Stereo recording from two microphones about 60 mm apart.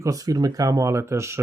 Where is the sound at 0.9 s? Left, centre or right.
Right.